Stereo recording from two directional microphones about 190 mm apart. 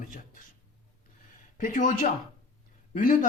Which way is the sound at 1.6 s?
45° left (ahead or behind).